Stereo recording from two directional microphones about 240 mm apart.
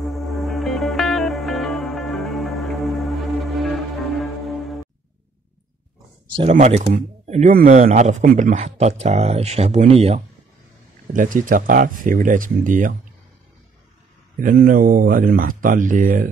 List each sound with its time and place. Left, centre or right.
0.0 s music: centre
6.3 s speech: right
14.4 s speech: right